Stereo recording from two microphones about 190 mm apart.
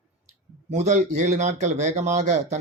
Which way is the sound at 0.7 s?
35° right (ahead or behind).